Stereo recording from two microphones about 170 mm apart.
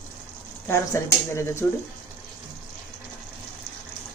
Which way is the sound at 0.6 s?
15° left (ahead or behind).